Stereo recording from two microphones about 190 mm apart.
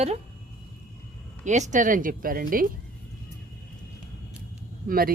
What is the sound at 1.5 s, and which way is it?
Speech, 40° right (ahead or behind).